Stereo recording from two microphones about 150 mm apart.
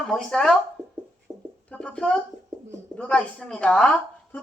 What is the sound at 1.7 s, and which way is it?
A woman's voice, 5° left (ahead or behind).